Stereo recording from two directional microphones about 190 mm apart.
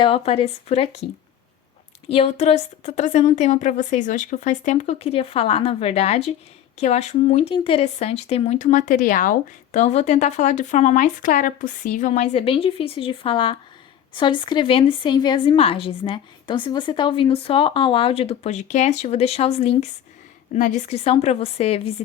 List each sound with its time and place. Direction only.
0.0 s speech: 30° left (ahead or behind)
2.0 s a woman's voice: 30° left (ahead or behind)